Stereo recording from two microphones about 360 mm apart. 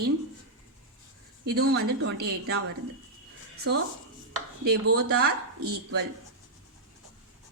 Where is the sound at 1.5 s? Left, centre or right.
Right.